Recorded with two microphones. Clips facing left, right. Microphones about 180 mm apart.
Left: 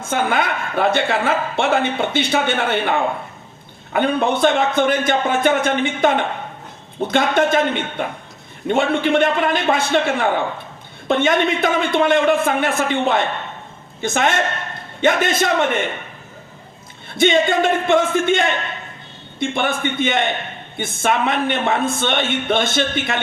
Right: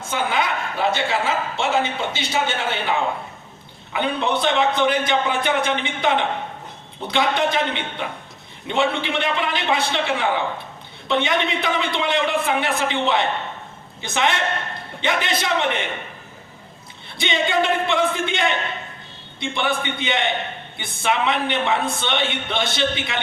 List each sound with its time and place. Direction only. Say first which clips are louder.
0.1 s a woman's voice: left 3 dB; 55° left (ahead or behind)
17.2 s a woman's voice: left 6 dB; 50° left (ahead or behind)